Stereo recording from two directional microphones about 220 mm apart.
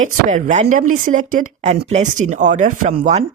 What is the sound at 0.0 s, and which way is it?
Speech, 35° right (ahead or behind).